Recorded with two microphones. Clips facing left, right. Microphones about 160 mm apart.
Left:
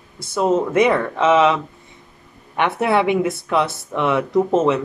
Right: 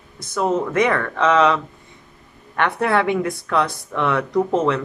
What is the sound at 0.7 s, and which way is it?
Speech, 15° left (ahead or behind).